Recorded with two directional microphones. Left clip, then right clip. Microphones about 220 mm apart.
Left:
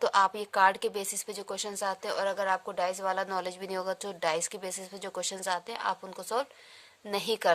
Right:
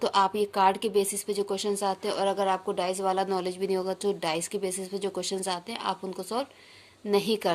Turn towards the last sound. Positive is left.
turn(degrees=35)  # may be behind; listen again after turning